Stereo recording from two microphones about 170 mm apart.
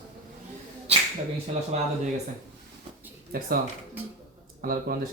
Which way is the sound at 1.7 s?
40° right (ahead or behind).